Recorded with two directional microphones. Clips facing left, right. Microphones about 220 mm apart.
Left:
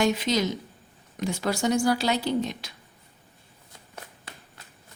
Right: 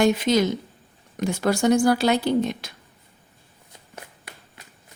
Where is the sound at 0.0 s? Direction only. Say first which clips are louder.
Right 5 dB; 55° right (ahead or behind).